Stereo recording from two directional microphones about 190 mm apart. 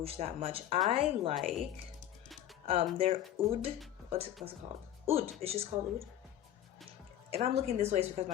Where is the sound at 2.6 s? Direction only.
30° right (ahead or behind).